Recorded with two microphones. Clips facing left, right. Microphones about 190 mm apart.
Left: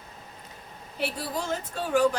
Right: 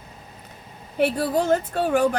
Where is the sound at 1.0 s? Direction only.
55° right (ahead or behind).